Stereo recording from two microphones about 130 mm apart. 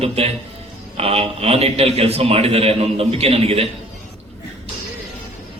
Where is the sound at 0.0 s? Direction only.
50° right (ahead or behind).